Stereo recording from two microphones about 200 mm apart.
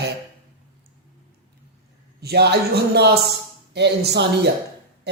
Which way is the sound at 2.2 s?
55° right (ahead or behind).